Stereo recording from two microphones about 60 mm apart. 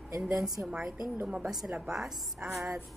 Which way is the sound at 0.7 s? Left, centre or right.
Centre.